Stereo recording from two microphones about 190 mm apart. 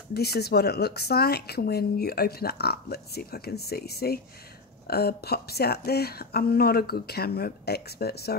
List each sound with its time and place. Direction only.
0.1 s speech: 55° left (ahead or behind)